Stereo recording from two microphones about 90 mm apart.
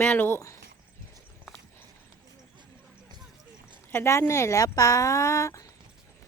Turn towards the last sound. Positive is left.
turn(degrees=35)  # may be behind; listen again after turning